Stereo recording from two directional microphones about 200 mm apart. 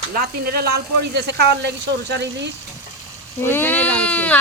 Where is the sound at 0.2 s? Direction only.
50° right (ahead or behind).